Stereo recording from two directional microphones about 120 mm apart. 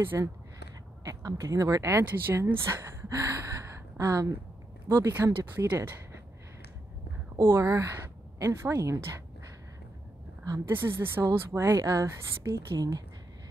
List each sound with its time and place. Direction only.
0.0 s speech: 20° right (ahead or behind)
7.3 s speech: 25° right (ahead or behind)
10.4 s a woman's voice: 30° right (ahead or behind)
10.7 s speech: 20° right (ahead or behind)